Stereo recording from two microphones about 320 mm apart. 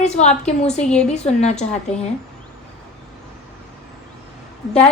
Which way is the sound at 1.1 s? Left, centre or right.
Left.